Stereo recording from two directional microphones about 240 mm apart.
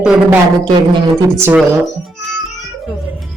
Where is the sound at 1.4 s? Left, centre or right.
Centre.